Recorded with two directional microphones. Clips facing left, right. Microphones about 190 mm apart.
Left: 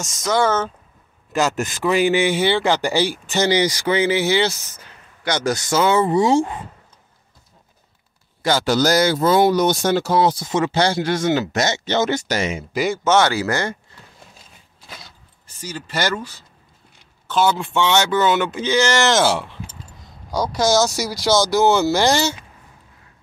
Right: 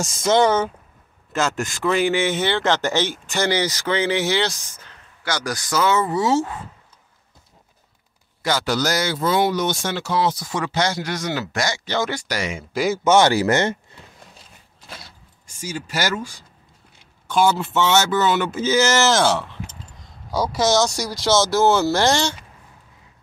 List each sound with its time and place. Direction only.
0.0 s speech: 30° right (ahead or behind)
1.3 s a man's voice: 15° left (ahead or behind)
5.3 s speech: 25° left (ahead or behind)
8.4 s speech: 30° left (ahead or behind)
10.1 s speech: 30° left (ahead or behind)
12.7 s speech: centre (ahead or behind)
13.0 s speech: 15° right (ahead or behind)
15.4 s speech: 10° right (ahead or behind)
19.3 s a sound: 10° left (ahead or behind)
20.2 s speech: 5° right (ahead or behind)